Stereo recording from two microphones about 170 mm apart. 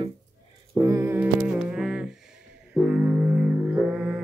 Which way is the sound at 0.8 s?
15° right (ahead or behind).